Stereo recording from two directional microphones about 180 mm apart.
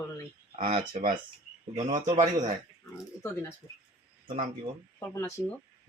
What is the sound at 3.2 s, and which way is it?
Speech, 15° left (ahead or behind).